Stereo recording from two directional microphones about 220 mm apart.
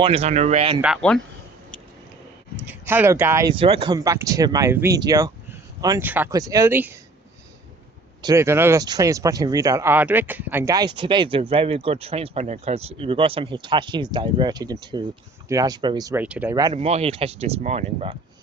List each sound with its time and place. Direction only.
0.0 s speech: 25° right (ahead or behind)
1.0 s speech: 5° left (ahead or behind)
2.6 s speech: 10° right (ahead or behind)
8.2 s speech: 15° right (ahead or behind)
16.8 s speech: 30° right (ahead or behind)